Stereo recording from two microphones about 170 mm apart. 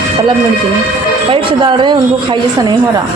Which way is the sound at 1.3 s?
30° right (ahead or behind).